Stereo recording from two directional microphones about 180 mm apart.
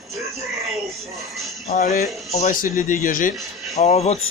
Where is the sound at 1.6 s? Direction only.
40° left (ahead or behind).